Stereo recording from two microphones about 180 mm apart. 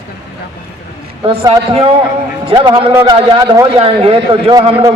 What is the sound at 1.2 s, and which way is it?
A man's voice, 25° right (ahead or behind).